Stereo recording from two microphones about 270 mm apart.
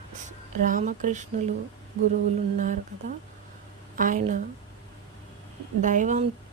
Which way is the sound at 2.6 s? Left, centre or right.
Right.